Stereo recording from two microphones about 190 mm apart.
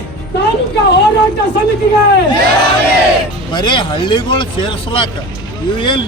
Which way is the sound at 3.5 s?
25° left (ahead or behind).